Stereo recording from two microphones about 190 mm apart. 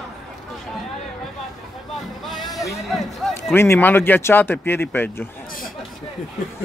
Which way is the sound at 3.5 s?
10° left (ahead or behind).